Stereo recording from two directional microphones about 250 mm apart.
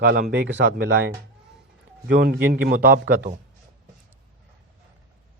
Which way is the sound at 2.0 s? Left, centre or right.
Right.